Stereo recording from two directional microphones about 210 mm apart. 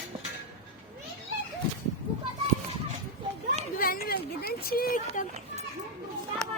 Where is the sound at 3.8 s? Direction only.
45° left (ahead or behind).